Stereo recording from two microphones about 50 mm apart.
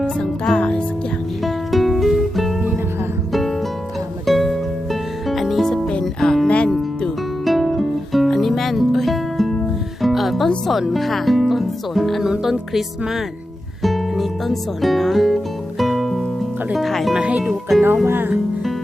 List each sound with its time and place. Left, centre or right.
0.5 s music: left
1.5 s music: centre
4.3 s music: centre
5.9 s music: centre
13.8 s speech: centre
15.8 s music: centre
16.7 s speech: centre
17.2 s speech: right
17.5 s speech: centre
18.0 s music: right